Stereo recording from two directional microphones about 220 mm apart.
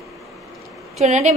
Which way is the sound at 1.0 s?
30° right (ahead or behind).